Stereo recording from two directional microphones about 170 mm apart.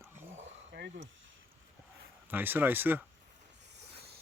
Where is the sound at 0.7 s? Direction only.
90° right.